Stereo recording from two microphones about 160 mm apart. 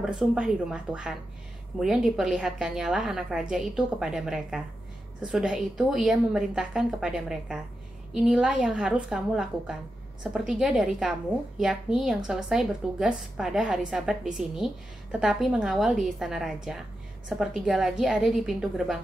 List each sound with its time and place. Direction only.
0.0 s a woman's voice: 5° right (ahead or behind)